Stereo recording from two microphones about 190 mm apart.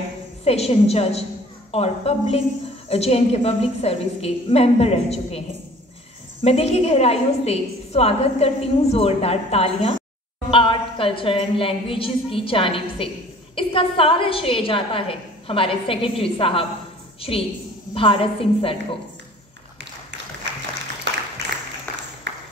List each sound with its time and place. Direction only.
0.4 s a woman's voice: 30° left (ahead or behind)
6.4 s a woman's voice: 35° left (ahead or behind)
21.5 s a sound: 65° right (ahead or behind)